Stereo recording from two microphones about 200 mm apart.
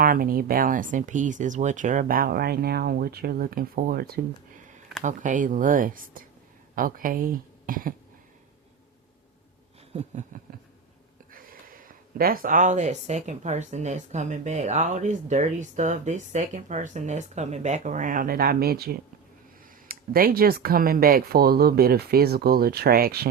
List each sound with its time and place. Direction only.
0.0 s speech: 45° right (ahead or behind)
9.9 s a sound: 35° right (ahead or behind)
11.3 s speech: 45° right (ahead or behind)